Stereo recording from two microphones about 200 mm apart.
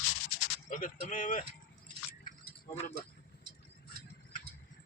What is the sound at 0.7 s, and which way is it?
Speech, 40° left (ahead or behind).